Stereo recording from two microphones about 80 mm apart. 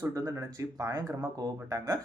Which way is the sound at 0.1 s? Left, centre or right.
Right.